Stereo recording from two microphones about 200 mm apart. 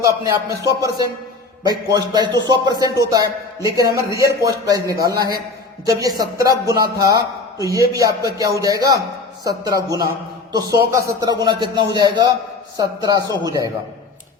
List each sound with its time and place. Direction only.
0.0 s a man's voice: 15° right (ahead or behind)